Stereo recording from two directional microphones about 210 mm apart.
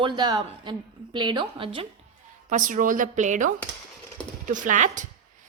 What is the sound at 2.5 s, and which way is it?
Speech, 40° right (ahead or behind).